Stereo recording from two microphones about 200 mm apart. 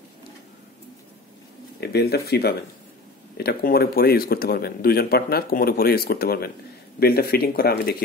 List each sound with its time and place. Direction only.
1.8 s speech: 55° left (ahead or behind)